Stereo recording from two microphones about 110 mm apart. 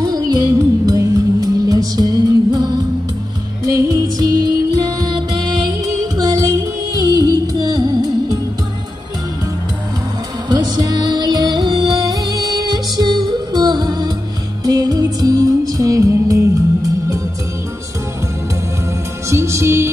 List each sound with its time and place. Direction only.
0.0 s music: 35° right (ahead or behind)
10.5 s music: 40° right (ahead or behind)
19.3 s music: 25° right (ahead or behind)